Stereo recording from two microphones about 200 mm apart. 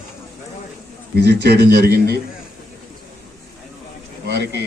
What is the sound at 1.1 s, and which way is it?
Speech, 55° right (ahead or behind).